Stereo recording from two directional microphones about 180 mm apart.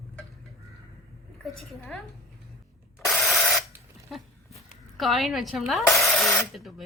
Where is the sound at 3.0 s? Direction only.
Centre (ahead or behind).